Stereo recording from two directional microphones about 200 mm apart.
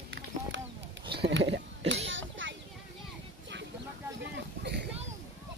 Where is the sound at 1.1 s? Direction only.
55° right (ahead or behind).